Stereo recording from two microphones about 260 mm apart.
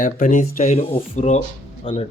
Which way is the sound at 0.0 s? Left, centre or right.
Left.